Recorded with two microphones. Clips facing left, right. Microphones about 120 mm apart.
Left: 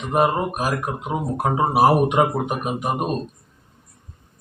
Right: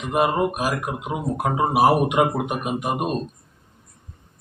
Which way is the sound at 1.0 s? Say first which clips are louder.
Left 1 dB; 5° right (ahead or behind).